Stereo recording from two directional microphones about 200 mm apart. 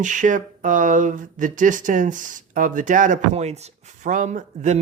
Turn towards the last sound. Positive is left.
turn(degrees=-35)  # may be behind; listen again after turning